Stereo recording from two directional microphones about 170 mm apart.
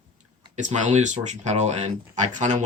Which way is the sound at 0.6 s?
45° right (ahead or behind).